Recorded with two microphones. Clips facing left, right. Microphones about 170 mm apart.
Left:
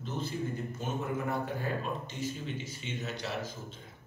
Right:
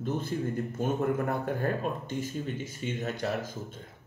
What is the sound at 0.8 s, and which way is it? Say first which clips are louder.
A man's voice: right 7 dB; 55° right (ahead or behind).